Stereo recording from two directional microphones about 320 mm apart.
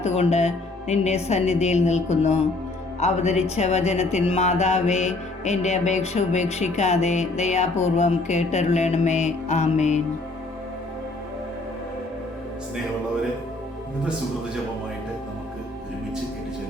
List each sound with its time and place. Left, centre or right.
0.0 s speech: centre